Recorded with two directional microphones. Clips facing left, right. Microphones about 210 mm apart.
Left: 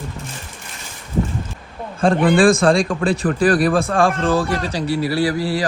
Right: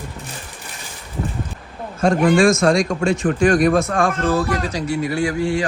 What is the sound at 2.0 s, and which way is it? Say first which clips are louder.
A man's voice: left 1 dB; 30° left (ahead or behind).